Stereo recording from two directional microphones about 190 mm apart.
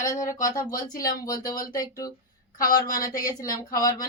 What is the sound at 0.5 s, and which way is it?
Speech, 20° left (ahead or behind).